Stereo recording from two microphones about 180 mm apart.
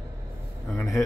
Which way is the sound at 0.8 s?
20° left (ahead or behind).